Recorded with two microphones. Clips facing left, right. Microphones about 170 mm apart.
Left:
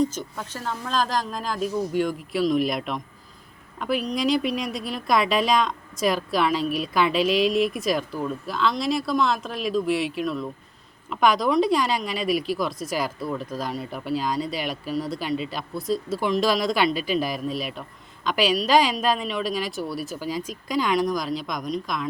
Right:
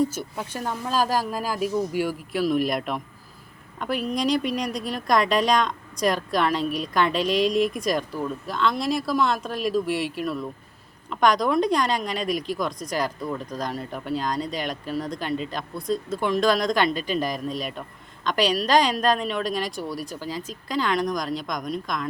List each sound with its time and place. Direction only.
0.0 s speech: 10° right (ahead or behind)